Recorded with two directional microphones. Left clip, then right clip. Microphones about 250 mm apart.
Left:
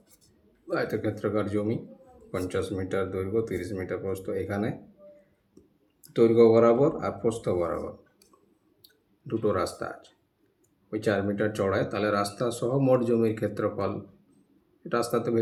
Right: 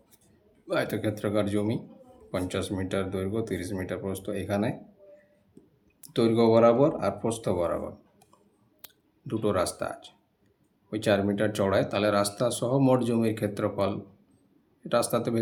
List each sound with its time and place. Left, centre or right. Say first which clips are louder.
0.7 s speech: even; right
6.0 s speech: left 5 dB; right
9.2 s speech: even; right